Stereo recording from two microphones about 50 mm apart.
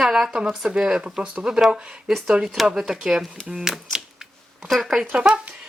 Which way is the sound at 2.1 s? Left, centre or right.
Centre.